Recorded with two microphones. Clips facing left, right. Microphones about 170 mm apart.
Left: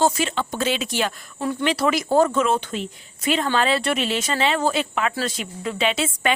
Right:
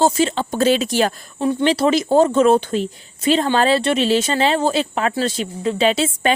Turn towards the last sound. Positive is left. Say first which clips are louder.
# right 5 dB
turn(degrees=-35)  # may be behind; listen again after turning